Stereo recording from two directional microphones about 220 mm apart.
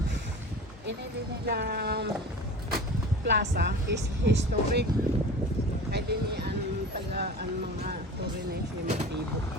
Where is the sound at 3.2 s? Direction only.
50° right (ahead or behind).